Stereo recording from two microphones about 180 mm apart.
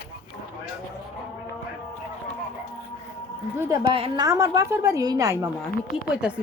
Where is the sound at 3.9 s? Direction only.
30° right (ahead or behind).